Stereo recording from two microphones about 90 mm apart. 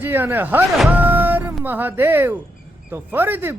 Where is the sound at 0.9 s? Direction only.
20° right (ahead or behind).